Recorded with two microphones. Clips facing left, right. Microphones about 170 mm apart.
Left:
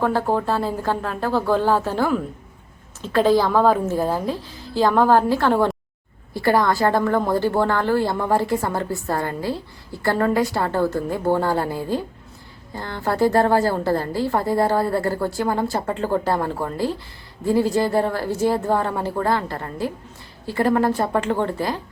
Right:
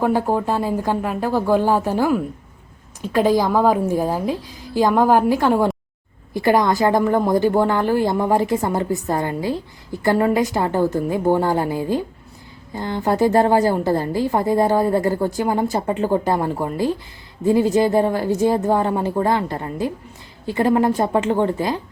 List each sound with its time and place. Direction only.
0.0 s a woman's voice: 15° right (ahead or behind)